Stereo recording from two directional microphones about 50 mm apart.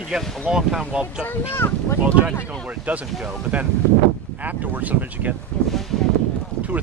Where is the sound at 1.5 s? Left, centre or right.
Left.